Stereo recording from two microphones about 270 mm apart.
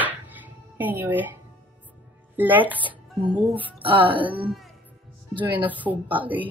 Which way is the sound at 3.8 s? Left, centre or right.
Centre.